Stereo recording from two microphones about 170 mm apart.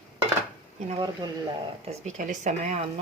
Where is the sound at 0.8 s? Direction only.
30° right (ahead or behind).